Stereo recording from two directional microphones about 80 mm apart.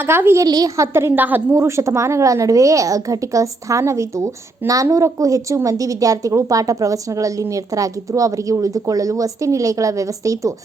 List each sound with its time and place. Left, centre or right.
0.0 s a woman's voice: right
0.4 s a woman's voice: right
0.8 s a woman's voice: right
1.5 s a woman's voice: right